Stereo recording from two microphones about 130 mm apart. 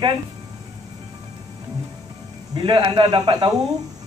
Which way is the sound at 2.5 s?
35° right (ahead or behind).